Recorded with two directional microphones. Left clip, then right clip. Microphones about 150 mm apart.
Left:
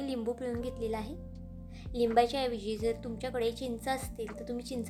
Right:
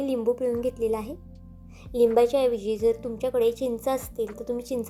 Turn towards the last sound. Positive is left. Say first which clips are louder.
# right 9 dB
turn(degrees=-15)  # may be behind; listen again after turning